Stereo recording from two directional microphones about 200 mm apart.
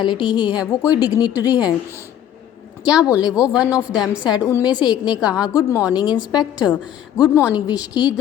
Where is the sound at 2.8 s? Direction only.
5° right (ahead or behind).